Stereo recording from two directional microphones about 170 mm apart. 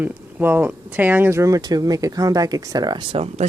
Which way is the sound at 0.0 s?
10° right (ahead or behind).